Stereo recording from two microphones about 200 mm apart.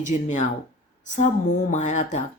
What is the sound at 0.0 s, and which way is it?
Speech, 40° left (ahead or behind).